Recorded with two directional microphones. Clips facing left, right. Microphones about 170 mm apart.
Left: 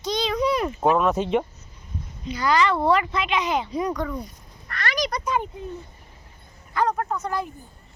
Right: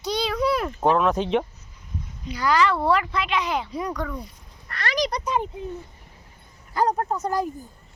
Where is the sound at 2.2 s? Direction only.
5° right (ahead or behind).